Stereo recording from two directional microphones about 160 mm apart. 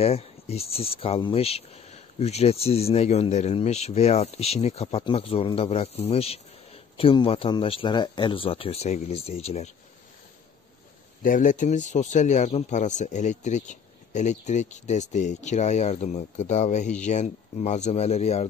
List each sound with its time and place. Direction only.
0.0 s speech: 40° left (ahead or behind)
11.2 s speech: 55° left (ahead or behind)